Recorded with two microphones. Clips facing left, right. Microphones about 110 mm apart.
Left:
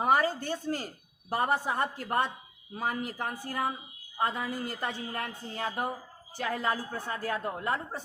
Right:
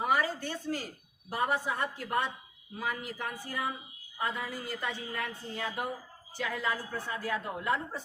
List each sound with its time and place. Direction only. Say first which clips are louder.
0.0 s a woman's voice: left 4 dB; 40° left (ahead or behind)